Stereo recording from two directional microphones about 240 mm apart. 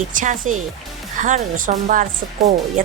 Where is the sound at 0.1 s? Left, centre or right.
Right.